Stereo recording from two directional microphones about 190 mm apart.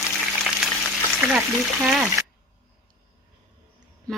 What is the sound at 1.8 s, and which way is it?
Speech, centre (ahead or behind).